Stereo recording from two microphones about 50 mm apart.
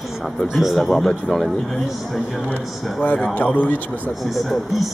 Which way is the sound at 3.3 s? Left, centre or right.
Left.